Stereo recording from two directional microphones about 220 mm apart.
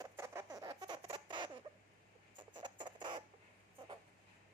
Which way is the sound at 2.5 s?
20° right (ahead or behind).